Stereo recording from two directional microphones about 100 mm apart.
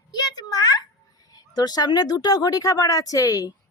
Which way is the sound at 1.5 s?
40° left (ahead or behind).